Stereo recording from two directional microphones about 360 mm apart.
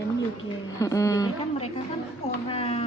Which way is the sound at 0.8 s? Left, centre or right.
Centre.